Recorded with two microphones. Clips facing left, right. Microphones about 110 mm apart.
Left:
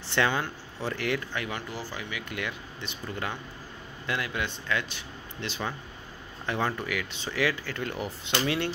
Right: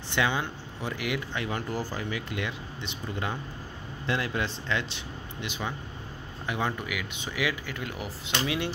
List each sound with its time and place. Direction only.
0.1 s speech: 15° right (ahead or behind)
2.0 s speech: 35° right (ahead or behind)
5.4 s speech: 15° right (ahead or behind)